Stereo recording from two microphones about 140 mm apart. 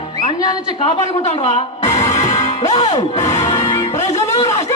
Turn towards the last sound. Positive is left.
turn(degrees=50)  # may be behind; listen again after turning